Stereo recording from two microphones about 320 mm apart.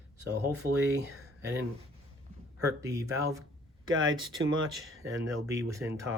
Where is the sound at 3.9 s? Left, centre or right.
Right.